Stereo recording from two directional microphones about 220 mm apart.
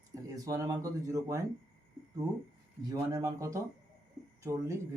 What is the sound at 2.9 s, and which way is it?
Speech, 15° right (ahead or behind).